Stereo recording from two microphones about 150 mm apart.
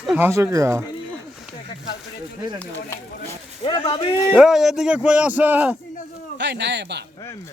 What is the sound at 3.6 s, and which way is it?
Speech, 30° left (ahead or behind).